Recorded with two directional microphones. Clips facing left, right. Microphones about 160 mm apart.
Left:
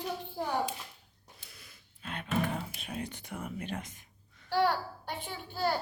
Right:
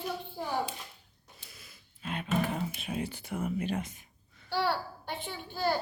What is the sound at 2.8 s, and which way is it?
Speech, 5° right (ahead or behind).